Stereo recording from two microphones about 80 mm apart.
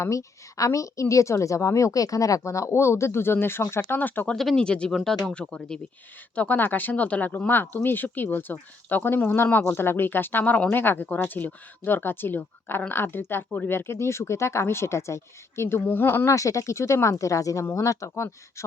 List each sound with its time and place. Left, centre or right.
0.0 s a woman's voice: left
4.3 s speech: centre
6.3 s a woman's voice: centre
16.3 s a woman's voice: left